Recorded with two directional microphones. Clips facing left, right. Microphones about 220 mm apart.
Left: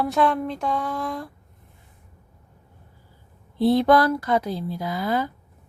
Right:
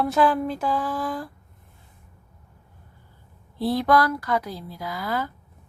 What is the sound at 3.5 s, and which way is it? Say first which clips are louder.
Speech: left 4 dB; 25° left (ahead or behind).